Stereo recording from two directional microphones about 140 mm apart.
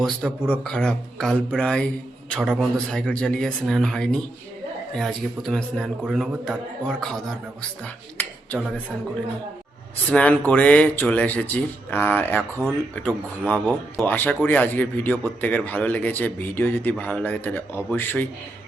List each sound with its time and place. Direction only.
0.4 s speech: 10° left (ahead or behind)
10.1 s speech: 10° left (ahead or behind)